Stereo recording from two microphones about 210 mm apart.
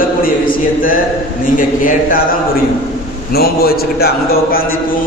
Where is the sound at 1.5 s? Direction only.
40° left (ahead or behind).